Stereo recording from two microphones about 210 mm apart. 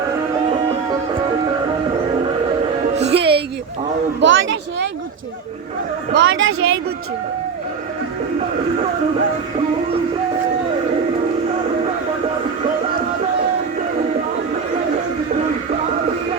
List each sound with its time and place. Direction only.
3.1 s music: 50° right (ahead or behind)
4.2 s a sound: 60° right (ahead or behind)
6.1 s a woman's voice: 65° right (ahead or behind)